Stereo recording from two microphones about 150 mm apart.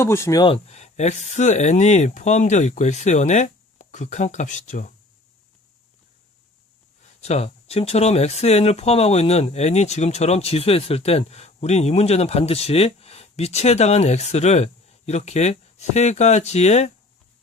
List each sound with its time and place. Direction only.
0.0 s speech: 20° left (ahead or behind)
0.4 s speech: 45° left (ahead or behind)
7.0 s speech: 45° left (ahead or behind)